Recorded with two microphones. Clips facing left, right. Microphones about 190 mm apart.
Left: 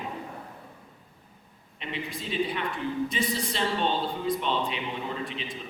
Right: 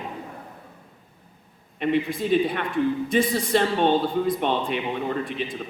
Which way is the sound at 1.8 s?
55° right (ahead or behind).